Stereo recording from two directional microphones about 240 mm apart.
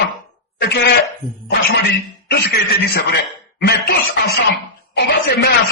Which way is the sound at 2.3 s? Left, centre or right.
Left.